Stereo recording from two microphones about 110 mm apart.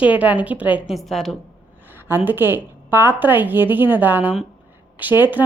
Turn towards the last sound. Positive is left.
turn(degrees=-15)  # may be behind; listen again after turning